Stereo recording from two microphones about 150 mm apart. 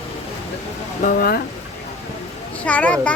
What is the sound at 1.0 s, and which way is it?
Speech, 75° left (ahead or behind).